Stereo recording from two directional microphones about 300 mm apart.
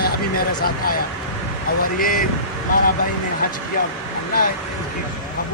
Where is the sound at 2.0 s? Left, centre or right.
Left.